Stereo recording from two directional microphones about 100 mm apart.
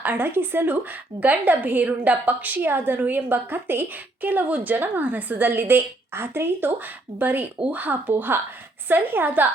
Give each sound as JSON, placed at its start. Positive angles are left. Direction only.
{"t": 0.0, "sound": "a woman's voice", "side_deg": -20}